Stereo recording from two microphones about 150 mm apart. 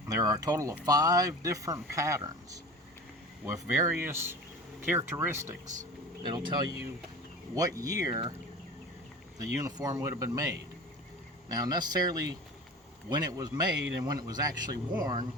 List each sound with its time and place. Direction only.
0.1 s speech: 25° right (ahead or behind)
5.6 s speech: 60° right (ahead or behind)
6.3 s speech: 30° right (ahead or behind)
9.4 s speech: 25° right (ahead or behind)
11.4 s speech: 25° right (ahead or behind)